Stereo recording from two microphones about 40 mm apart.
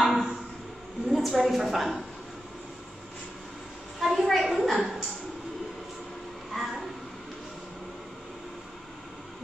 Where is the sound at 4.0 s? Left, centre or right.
Centre.